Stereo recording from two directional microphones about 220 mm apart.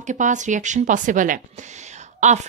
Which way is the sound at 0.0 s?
35° right (ahead or behind).